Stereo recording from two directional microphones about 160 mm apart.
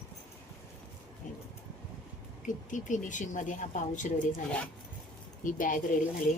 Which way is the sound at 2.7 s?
50° left (ahead or behind).